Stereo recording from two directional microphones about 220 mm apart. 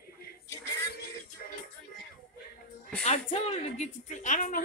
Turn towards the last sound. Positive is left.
turn(degrees=35)  # may be behind; listen again after turning